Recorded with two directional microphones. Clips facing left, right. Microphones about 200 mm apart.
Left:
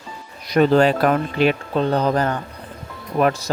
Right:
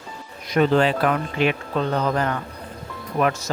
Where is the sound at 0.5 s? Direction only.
40° left (ahead or behind).